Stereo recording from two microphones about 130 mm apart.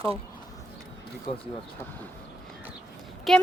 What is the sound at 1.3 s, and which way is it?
Speech, 50° left (ahead or behind).